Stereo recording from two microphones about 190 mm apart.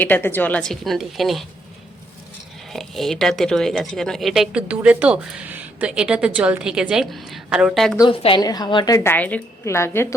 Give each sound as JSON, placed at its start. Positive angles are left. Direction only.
{"t": 0.0, "sound": "speech", "side_deg": 10}
{"t": 2.6, "sound": "speech", "side_deg": 0}
{"t": 8.2, "sound": "a woman's voice", "side_deg": 25}
{"t": 9.1, "sound": "a woman's voice", "side_deg": 10}